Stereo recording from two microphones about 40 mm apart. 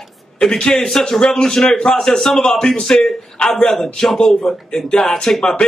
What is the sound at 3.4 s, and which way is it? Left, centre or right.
A man's voice, centre.